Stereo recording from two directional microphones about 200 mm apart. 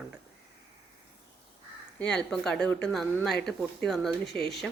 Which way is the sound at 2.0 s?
5° left (ahead or behind).